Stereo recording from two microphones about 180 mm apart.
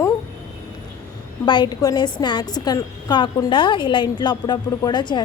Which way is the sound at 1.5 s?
25° left (ahead or behind).